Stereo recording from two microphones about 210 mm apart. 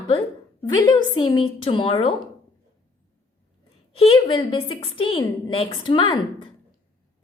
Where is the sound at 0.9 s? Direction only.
20° left (ahead or behind).